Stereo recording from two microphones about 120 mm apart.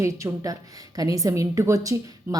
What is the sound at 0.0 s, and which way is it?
A woman's voice, 25° right (ahead or behind).